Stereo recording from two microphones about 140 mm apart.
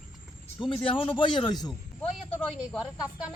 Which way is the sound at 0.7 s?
35° left (ahead or behind).